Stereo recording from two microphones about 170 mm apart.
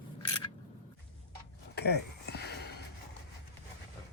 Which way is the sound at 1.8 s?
75° left (ahead or behind).